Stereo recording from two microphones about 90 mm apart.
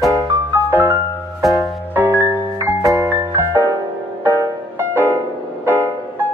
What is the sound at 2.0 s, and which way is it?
Music, 25° right (ahead or behind).